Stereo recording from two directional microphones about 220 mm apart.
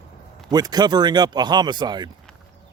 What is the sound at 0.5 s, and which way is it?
Speech, 15° right (ahead or behind).